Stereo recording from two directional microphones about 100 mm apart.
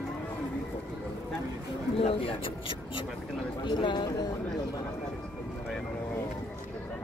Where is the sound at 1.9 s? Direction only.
70° left (ahead or behind); by 4.2 s 50° left (ahead or behind).